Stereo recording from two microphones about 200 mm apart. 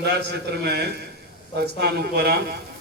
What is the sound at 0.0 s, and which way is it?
A man's voice, 55° right (ahead or behind).